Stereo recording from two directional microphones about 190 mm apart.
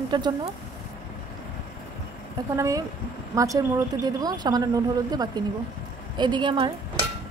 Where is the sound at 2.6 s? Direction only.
15° right (ahead or behind).